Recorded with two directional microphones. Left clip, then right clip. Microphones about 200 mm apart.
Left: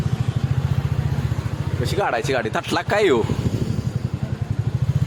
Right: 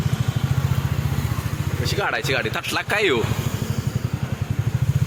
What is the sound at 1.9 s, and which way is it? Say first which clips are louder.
Speech: left 1 dB; 30° left (ahead or behind).